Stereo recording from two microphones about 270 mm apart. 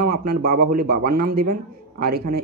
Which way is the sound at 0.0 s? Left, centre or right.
Right.